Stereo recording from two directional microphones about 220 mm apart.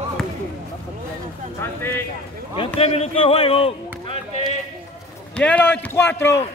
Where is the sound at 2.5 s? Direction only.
25° left (ahead or behind).